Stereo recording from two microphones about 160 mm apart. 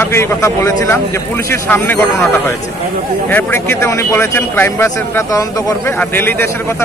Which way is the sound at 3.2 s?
15° left (ahead or behind).